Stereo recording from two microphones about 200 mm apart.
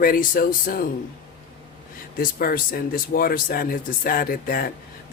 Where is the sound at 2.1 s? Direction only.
45° left (ahead or behind).